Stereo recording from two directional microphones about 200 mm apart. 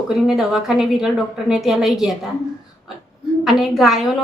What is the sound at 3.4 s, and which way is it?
Speech, centre (ahead or behind).